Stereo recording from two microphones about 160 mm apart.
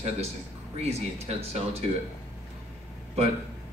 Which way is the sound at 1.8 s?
40° right (ahead or behind).